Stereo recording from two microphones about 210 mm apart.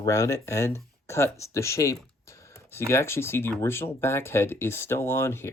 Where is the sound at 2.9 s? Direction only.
10° left (ahead or behind).